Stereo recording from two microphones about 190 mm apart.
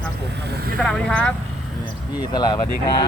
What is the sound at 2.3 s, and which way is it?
Speech, 20° left (ahead or behind).